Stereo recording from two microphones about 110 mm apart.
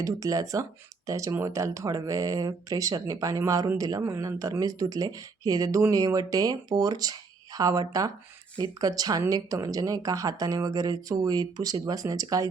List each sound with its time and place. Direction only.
0.0 s speech: 30° right (ahead or behind)